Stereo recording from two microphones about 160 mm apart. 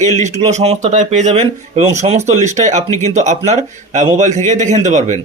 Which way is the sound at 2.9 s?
20° left (ahead or behind).